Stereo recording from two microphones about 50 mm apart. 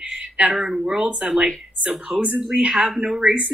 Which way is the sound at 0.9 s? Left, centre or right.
Right.